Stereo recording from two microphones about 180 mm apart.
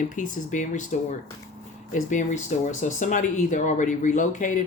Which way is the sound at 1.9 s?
45° left (ahead or behind).